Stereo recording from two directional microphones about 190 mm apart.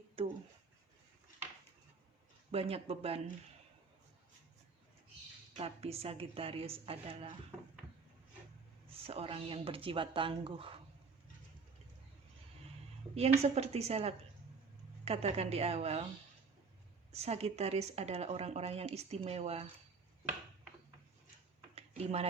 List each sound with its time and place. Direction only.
0.2 s a sound: 30° right (ahead or behind)
2.5 s speech: 30° right (ahead or behind)
5.5 s speech: 30° right (ahead or behind)
9.0 s speech: 30° right (ahead or behind)
13.1 s speech: 35° right (ahead or behind)
17.1 s speech: 35° right (ahead or behind)
21.8 s a sound: 30° right (ahead or behind)